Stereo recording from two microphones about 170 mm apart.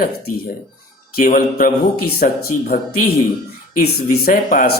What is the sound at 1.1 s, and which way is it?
Speech, 60° left (ahead or behind).